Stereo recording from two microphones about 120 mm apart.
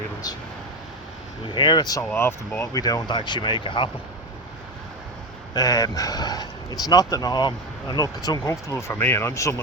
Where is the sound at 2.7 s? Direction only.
30° left (ahead or behind).